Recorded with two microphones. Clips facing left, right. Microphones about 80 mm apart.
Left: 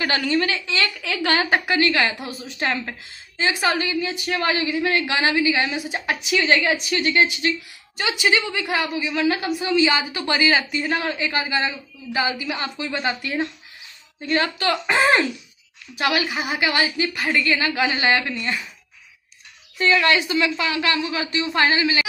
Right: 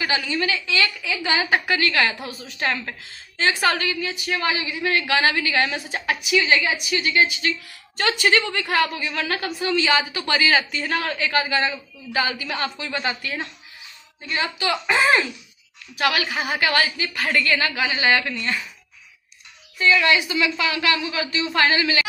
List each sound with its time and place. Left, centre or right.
0.0 s a woman's voice: left
0.8 s a woman's voice: left
1.5 s a woman's voice: left
6.0 s a woman's voice: left
8.0 s a woman's voice: centre; by 13.5 s left
14.2 s a woman's voice: left
16.0 s a woman's voice: left
19.8 s a woman's voice: left